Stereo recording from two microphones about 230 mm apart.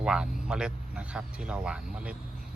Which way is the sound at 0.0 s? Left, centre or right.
Centre.